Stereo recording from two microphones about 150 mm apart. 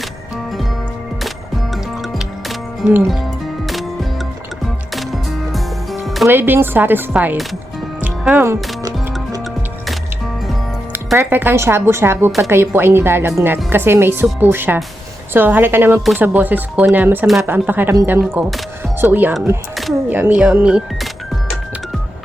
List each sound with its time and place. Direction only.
1.7 s music: centre (ahead or behind)
4.6 s music: centre (ahead or behind)
6.2 s speech: 15° right (ahead or behind)
8.0 s music: 10° right (ahead or behind)
11.2 s speech: 15° right (ahead or behind)
18.2 s speech: centre (ahead or behind)
18.9 s speech: 15° right (ahead or behind)